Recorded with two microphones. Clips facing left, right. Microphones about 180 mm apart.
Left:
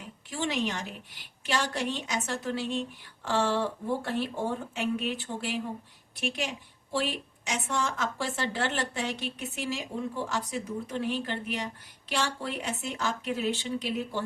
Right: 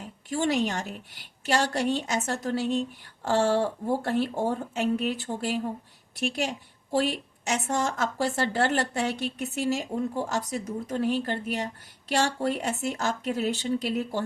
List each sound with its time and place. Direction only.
0.3 s a woman's voice: 45° right (ahead or behind)